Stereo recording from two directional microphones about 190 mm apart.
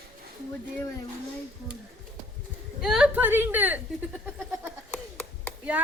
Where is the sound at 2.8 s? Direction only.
5° right (ahead or behind).